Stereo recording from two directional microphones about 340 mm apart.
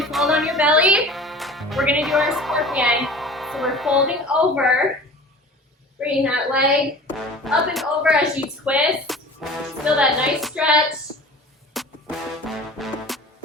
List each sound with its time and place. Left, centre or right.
0.0 s speech: centre
6.0 s a woman's voice: centre
11.7 s music: centre